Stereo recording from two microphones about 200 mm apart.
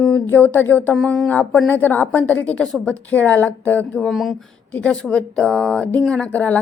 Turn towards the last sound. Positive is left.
turn(degrees=5)  # may be behind; listen again after turning